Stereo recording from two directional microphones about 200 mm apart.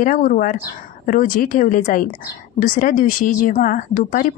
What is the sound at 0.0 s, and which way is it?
A woman's voice, 40° left (ahead or behind).